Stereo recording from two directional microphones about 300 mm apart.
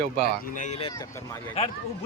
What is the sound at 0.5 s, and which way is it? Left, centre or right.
Speech, left.